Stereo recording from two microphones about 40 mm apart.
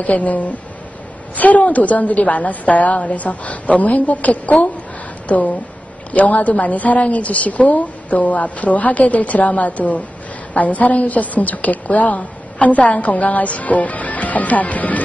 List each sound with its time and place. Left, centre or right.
0.0 s a woman's voice: left